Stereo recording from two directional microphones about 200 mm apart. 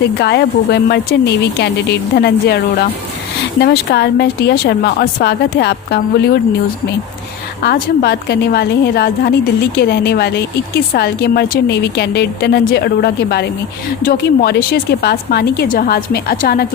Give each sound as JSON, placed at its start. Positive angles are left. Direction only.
{"t": 0.0, "sound": "speech", "side_deg": 55}
{"t": 7.6, "sound": "speech", "side_deg": 55}